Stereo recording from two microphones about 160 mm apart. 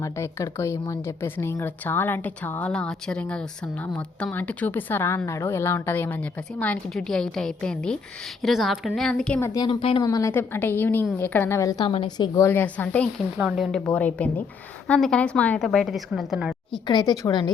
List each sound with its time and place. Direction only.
0.0 s a woman's voice: 20° left (ahead or behind)
9.5 s a woman's voice: 30° left (ahead or behind)
10.1 s a woman's voice: 20° left (ahead or behind)
12.5 s speech: 10° left (ahead or behind)
13.3 s speech: 5° right (ahead or behind)
13.7 s a woman's voice: 5° left (ahead or behind)
16.7 s a woman's voice: 30° left (ahead or behind)